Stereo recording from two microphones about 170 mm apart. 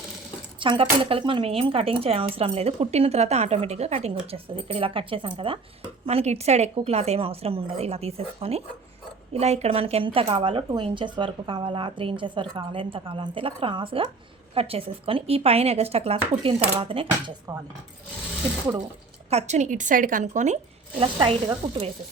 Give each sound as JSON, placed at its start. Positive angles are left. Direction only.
{"t": 0.6, "sound": "speech", "side_deg": -30}
{"t": 19.3, "sound": "a woman's voice", "side_deg": -40}
{"t": 21.0, "sound": "speech", "side_deg": -30}